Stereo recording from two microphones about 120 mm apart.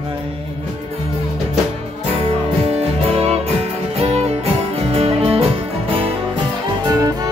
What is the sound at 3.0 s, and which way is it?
Music, 55° right (ahead or behind).